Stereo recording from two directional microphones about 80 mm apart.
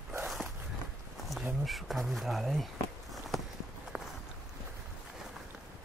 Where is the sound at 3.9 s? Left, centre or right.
Centre.